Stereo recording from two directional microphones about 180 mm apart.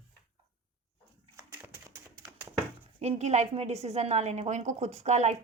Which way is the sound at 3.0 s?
35° right (ahead or behind).